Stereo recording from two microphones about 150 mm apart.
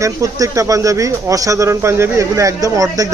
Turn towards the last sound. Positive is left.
turn(degrees=-20)  # may be behind; listen again after turning